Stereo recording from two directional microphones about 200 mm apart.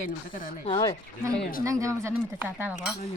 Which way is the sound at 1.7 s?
15° right (ahead or behind).